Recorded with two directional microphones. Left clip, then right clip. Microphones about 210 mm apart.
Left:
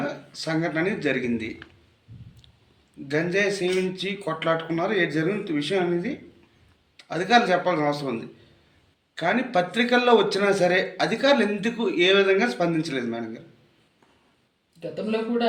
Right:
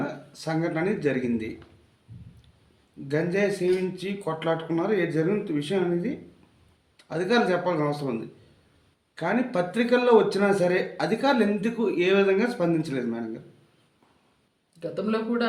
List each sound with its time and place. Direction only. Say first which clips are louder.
0.4 s a man's voice: left 2 dB; 50° right (ahead or behind)
3.1 s a man's voice: left 2 dB; 55° right (ahead or behind)
9.1 s a man's voice: left 3 dB; 55° right (ahead or behind)
14.8 s speech: left 1 dB; 10° right (ahead or behind)